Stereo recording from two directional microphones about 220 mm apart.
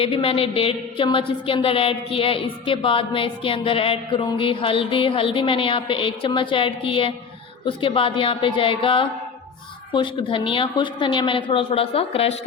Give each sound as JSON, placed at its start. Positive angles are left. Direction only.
{"t": 0.0, "sound": "a woman's voice", "side_deg": 25}